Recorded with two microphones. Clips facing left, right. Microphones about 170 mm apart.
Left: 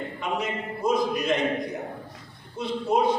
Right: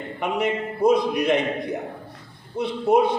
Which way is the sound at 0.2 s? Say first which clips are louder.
Right 7 dB; 60° right (ahead or behind).